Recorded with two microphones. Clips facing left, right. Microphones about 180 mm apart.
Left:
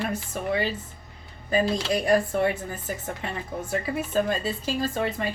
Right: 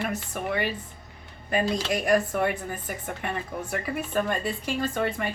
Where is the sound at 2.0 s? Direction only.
25° left (ahead or behind).